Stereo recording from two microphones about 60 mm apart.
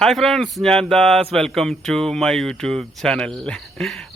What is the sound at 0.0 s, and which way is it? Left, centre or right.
Speech, centre.